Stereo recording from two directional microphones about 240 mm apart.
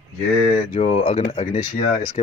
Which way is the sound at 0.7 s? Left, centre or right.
Left.